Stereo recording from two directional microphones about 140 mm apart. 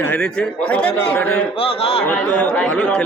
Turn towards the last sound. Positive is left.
turn(degrees=10)  # may be behind; listen again after turning